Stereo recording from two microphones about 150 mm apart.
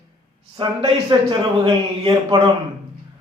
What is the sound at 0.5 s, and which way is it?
A man's voice, 40° right (ahead or behind).